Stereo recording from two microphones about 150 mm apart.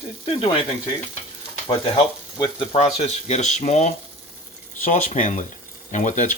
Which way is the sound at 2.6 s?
40° left (ahead or behind).